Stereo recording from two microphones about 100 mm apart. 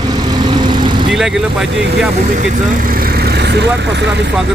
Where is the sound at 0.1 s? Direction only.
45° right (ahead or behind).